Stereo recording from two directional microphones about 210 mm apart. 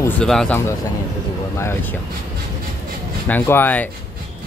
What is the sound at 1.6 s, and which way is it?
Speech, 10° left (ahead or behind).